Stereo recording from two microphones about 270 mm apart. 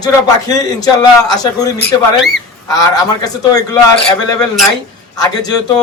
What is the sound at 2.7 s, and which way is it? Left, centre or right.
Speech, centre.